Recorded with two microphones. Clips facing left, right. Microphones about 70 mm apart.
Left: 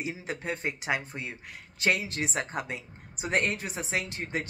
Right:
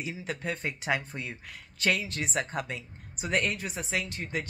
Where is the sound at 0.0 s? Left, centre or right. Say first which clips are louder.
Even; left.